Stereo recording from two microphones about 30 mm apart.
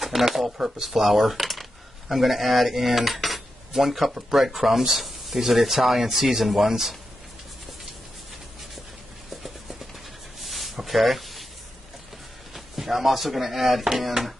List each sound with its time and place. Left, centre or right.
0.1 s speech: centre
0.8 s speech: centre
9.3 s a sound: centre
12.5 s speech: centre